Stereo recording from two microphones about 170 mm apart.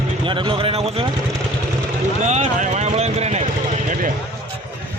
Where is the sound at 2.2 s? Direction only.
45° right (ahead or behind).